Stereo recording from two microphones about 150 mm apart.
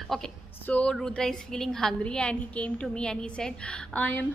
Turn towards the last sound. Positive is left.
turn(degrees=10)  # may be behind; listen again after turning